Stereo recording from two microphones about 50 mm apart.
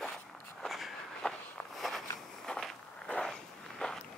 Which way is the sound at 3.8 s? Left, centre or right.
Centre.